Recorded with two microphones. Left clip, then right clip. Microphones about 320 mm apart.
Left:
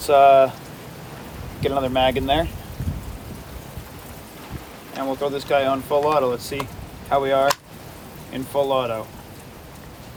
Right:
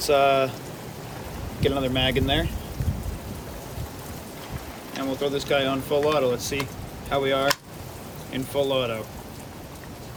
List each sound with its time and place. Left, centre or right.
0.0 s speech: centre
1.6 s speech: centre
4.9 s speech: centre